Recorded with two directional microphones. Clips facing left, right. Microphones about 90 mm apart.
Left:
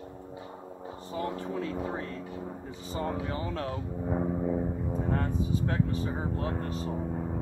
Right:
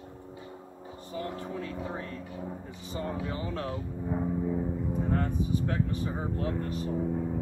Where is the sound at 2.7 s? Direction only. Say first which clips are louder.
Left 4 dB; 35° left (ahead or behind).